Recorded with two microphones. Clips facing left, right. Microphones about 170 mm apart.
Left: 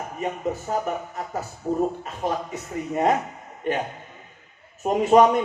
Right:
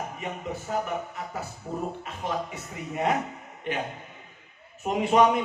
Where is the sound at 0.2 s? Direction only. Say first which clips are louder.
Left 11 dB; 40° left (ahead or behind).